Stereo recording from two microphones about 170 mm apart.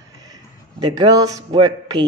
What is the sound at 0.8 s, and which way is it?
A woman's voice, 25° right (ahead or behind).